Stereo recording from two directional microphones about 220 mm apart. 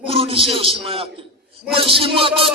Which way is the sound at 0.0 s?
25° right (ahead or behind).